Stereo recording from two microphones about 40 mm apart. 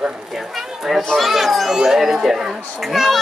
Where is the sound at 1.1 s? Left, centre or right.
Centre.